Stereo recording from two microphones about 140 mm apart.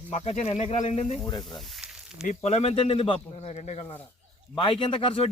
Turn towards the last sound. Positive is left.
turn(degrees=40)  # may be behind; listen again after turning